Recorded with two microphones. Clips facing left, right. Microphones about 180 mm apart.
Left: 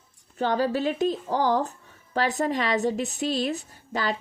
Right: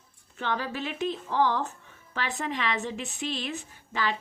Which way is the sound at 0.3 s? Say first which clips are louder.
Left 7 dB; 35° left (ahead or behind).